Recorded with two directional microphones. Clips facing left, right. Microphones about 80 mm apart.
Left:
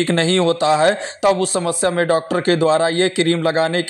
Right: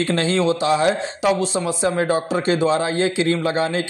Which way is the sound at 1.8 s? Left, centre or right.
Left.